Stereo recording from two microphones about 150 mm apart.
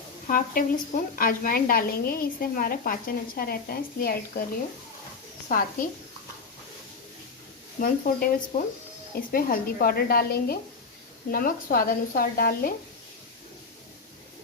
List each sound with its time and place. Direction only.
0.3 s a woman's voice: 70° left (ahead or behind); by 4.4 s 85° left
5.5 s a woman's voice: 70° left (ahead or behind)
7.8 s speech: 65° left (ahead or behind)
9.3 s a woman's voice: 75° left (ahead or behind)
11.3 s a woman's voice: 75° left (ahead or behind)